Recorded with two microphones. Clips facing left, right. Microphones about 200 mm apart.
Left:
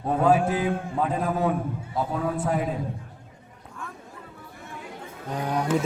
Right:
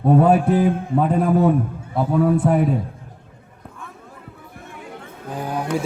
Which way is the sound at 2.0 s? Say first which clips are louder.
Right 6 dB; 60° right (ahead or behind).